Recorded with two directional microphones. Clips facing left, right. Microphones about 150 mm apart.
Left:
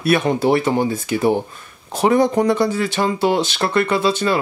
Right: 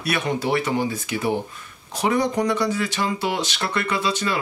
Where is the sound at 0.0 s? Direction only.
50° left (ahead or behind).